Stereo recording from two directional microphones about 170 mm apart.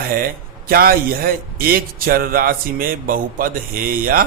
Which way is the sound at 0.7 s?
60° right (ahead or behind).